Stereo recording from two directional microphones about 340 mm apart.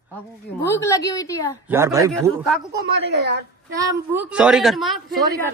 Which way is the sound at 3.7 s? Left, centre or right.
Centre.